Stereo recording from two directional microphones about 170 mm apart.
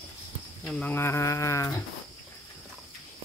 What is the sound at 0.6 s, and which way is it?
Livestock, 10° left (ahead or behind).